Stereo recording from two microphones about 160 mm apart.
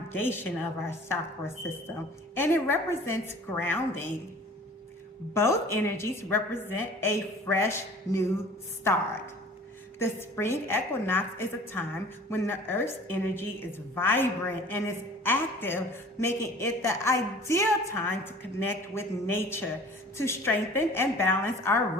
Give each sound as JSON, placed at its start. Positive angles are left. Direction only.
{"t": 0.1, "sound": "a woman's voice", "side_deg": 15}
{"t": 5.3, "sound": "a woman's voice", "side_deg": 15}